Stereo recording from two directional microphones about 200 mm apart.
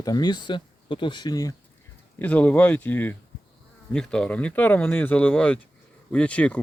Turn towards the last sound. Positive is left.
turn(degrees=5)  # may be behind; listen again after turning